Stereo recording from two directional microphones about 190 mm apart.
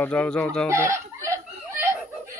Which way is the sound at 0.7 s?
15° right (ahead or behind).